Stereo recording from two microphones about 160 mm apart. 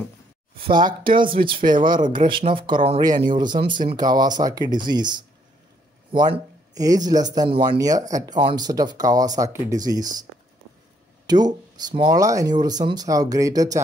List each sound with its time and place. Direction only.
0.7 s speech: 30° right (ahead or behind)
1.0 s speech: 60° right (ahead or behind)
1.8 s speech: 30° right (ahead or behind)
11.2 s speech: 25° right (ahead or behind)